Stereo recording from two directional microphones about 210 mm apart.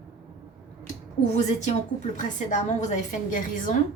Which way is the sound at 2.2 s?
35° left (ahead or behind).